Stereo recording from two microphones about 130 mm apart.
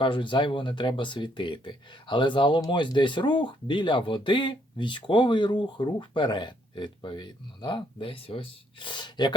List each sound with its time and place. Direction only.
0.0 s speech: 40° left (ahead or behind)